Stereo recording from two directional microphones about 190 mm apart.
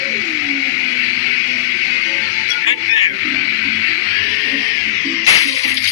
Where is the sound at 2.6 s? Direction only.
30° left (ahead or behind).